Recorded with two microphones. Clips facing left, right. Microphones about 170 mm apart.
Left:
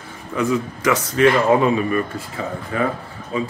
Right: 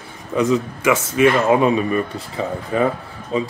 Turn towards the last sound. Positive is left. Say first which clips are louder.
# right 2 dB
turn(degrees=-20)  # may be behind; listen again after turning